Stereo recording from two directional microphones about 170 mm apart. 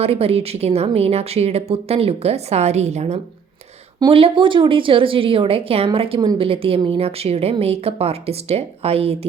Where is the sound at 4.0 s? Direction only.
30° right (ahead or behind).